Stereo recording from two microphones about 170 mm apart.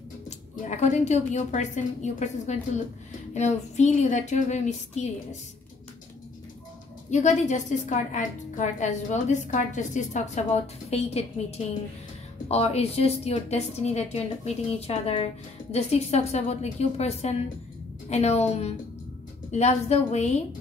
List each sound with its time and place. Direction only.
0.7 s a woman's voice: 45° left (ahead or behind)
7.1 s a woman's voice: 45° left (ahead or behind)